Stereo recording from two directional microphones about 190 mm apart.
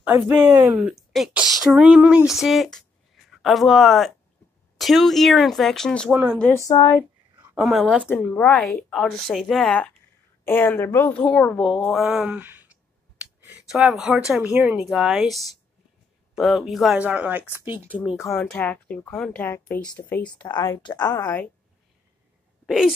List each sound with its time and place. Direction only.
0.0 s a woman's voice: 10° right (ahead or behind)
6.7 s a woman's voice: 20° left (ahead or behind)
7.0 s a sound: 15° right (ahead or behind)
7.5 s a woman's voice: centre (ahead or behind)
18.2 s speech: 15° left (ahead or behind)
20.4 s a woman's voice: 20° left (ahead or behind)
22.7 s a woman's voice: centre (ahead or behind)